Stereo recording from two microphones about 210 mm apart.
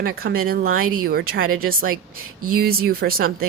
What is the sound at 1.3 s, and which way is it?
Speech, 75° right (ahead or behind).